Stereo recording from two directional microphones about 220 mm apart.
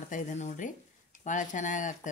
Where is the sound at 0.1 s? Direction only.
35° left (ahead or behind).